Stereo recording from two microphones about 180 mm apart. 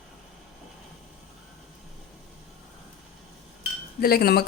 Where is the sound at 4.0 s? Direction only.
55° left (ahead or behind).